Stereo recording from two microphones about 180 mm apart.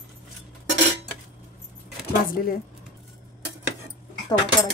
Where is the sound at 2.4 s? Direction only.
60° left (ahead or behind).